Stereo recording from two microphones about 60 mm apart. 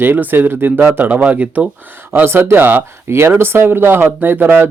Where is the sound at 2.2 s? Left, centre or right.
Right.